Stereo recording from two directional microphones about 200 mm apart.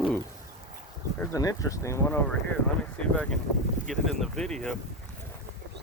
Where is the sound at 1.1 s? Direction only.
15° left (ahead or behind).